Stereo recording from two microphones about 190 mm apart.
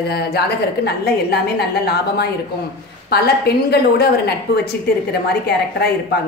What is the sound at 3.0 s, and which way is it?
A woman's voice, 55° left (ahead or behind).